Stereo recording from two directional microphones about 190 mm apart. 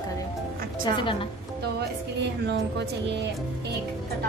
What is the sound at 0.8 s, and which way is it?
Speech, 25° left (ahead or behind).